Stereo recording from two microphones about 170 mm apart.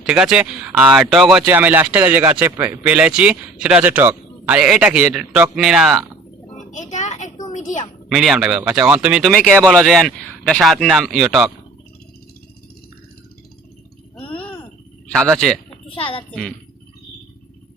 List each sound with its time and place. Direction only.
0.0 s speech: 5° right (ahead or behind)
6.5 s a sound: 45° left (ahead or behind)
8.1 s speech: centre (ahead or behind)
14.2 s babbling: 30° left (ahead or behind)
15.1 s speech: centre (ahead or behind)
16.0 s a woman's voice: 30° left (ahead or behind)
16.3 s speech: 5° left (ahead or behind)